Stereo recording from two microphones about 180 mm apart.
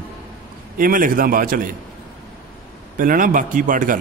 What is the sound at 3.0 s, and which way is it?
A man's voice, 50° right (ahead or behind).